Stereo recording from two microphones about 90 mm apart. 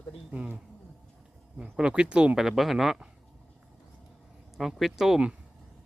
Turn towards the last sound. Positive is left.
turn(degrees=-10)  # may be behind; listen again after turning